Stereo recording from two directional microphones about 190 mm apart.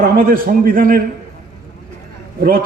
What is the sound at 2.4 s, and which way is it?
Speech, 50° right (ahead or behind).